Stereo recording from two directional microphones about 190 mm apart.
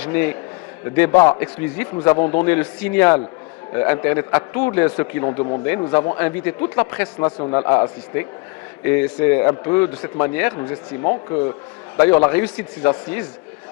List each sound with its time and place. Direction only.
0.0 s a man's voice: 10° left (ahead or behind)
7.2 s a man's voice: 25° left (ahead or behind)
11.9 s a man's voice: 10° left (ahead or behind)